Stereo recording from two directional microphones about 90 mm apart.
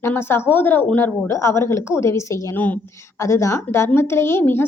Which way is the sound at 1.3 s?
30° left (ahead or behind).